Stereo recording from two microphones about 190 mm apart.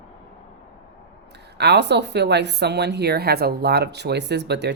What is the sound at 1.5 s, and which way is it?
Speech, 60° right (ahead or behind).